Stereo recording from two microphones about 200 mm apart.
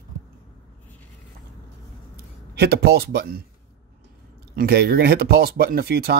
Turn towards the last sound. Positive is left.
turn(degrees=-55)  # may be behind; listen again after turning